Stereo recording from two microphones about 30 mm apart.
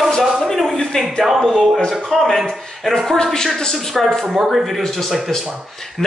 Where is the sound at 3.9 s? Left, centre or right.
Centre.